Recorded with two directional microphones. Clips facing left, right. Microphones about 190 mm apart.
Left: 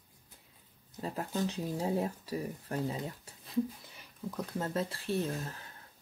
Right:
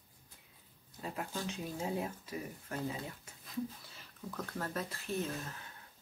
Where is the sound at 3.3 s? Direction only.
35° left (ahead or behind).